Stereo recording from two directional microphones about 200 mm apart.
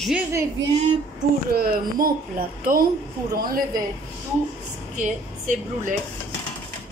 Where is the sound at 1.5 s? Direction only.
50° right (ahead or behind).